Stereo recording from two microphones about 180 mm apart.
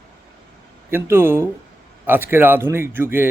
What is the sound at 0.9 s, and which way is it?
Speech, 10° right (ahead or behind).